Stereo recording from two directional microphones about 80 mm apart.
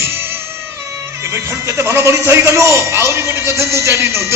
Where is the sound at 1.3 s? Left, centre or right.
Right.